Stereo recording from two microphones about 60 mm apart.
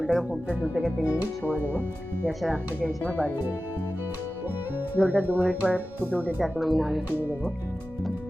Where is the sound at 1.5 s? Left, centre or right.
Right.